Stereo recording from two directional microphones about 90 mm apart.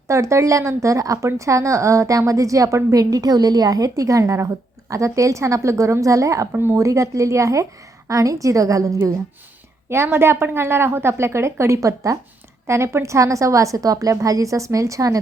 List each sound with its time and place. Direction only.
0.1 s a woman's voice: 35° right (ahead or behind)
6.5 s a woman's voice: 25° right (ahead or behind)
6.8 s a woman's voice: 35° right (ahead or behind)